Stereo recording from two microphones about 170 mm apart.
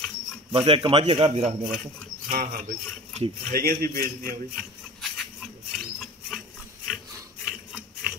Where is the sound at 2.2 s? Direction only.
50° right (ahead or behind).